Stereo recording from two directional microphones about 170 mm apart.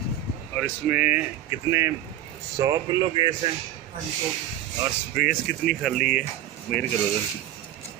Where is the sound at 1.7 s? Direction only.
15° right (ahead or behind).